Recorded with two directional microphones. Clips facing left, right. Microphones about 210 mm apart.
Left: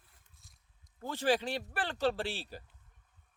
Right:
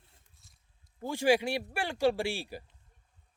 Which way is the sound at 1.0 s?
10° right (ahead or behind).